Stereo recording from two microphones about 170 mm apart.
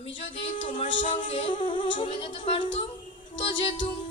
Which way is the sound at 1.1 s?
30° left (ahead or behind).